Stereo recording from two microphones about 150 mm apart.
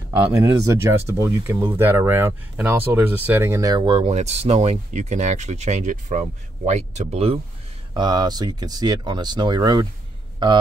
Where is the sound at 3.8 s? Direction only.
45° right (ahead or behind).